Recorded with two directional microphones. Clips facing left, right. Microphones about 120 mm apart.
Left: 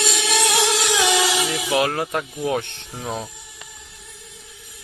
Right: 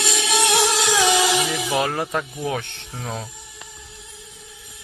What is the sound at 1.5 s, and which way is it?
Speech, 5° left (ahead or behind).